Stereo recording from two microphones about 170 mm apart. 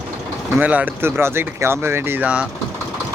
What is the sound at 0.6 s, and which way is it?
Speech, 10° right (ahead or behind).